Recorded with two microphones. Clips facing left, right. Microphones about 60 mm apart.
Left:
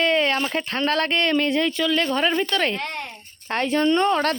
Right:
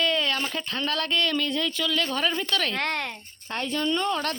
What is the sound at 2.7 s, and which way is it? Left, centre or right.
Speech, right.